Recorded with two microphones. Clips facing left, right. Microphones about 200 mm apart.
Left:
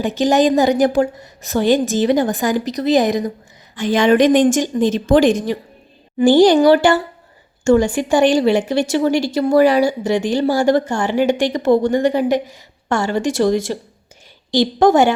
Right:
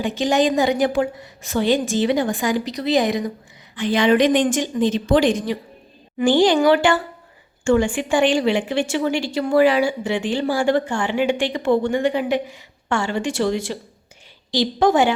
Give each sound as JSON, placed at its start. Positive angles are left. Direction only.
{"t": 0.0, "sound": "a woman's voice", "side_deg": 40}